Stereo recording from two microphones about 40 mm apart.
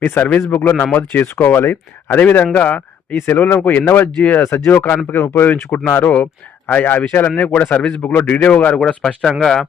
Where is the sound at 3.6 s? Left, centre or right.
Left.